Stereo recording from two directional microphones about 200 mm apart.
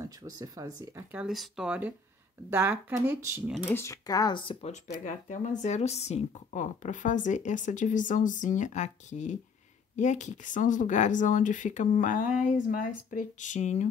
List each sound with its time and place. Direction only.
0.0 s speech: 15° right (ahead or behind)
1.1 s speech: centre (ahead or behind)
3.6 s speech: 15° left (ahead or behind); by 13.8 s 35° left (ahead or behind)